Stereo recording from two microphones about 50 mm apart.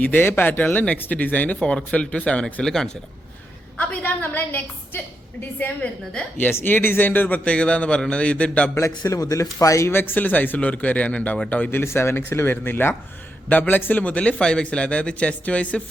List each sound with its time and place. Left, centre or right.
0.2 s speech: left
1.5 s a man's voice: left
2.6 s speech: centre
3.8 s speech: left
7.5 s a man's voice: left
9.2 s speech: left
9.9 s speech: left
10.2 s speech: left
11.9 s speech: left
13.5 s a man's voice: left